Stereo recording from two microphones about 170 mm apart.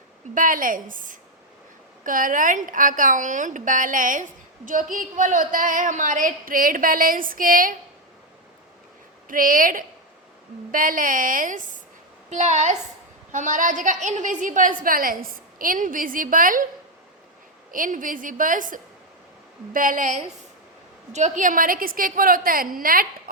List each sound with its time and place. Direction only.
0.3 s a woman's voice: 55° right (ahead or behind)
9.3 s a woman's voice: 55° right (ahead or behind)
17.7 s a woman's voice: 55° right (ahead or behind)